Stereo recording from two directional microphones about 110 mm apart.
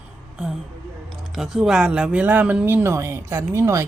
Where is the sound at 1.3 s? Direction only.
5° right (ahead or behind).